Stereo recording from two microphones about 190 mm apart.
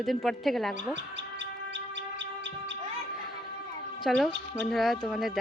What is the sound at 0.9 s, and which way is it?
Bird, 70° right (ahead or behind).